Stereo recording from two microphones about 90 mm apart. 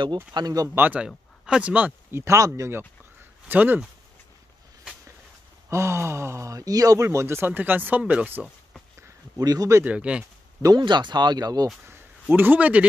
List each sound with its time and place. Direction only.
0.0 s speech: 55° right (ahead or behind)
0.7 s speech: 20° right (ahead or behind)
1.0 s speech: 10° right (ahead or behind)
2.1 s speech: 35° right (ahead or behind)
3.2 s a sound: 20° right (ahead or behind)
5.7 s speech: 30° right (ahead or behind); by 8.3 s 15° right (ahead or behind)
9.4 s speech: 45° right (ahead or behind)
9.8 s speech: 10° right (ahead or behind)
10.8 s speech: 60° right (ahead or behind)
11.8 s speech: 25° right (ahead or behind)